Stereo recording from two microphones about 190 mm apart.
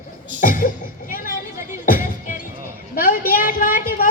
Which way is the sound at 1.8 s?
45° left (ahead or behind).